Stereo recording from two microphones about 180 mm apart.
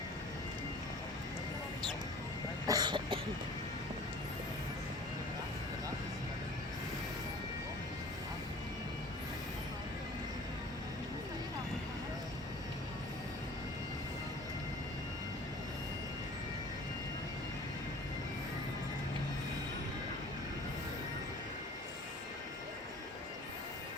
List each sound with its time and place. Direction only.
2.6 s cough: 20° right (ahead or behind)